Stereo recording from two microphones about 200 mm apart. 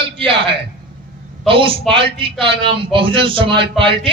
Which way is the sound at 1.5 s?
25° right (ahead or behind).